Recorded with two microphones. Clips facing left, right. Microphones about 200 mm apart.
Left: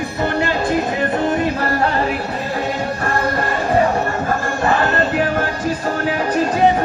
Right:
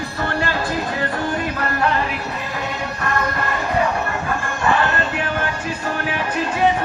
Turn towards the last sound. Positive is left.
turn(degrees=35)  # may be behind; listen again after turning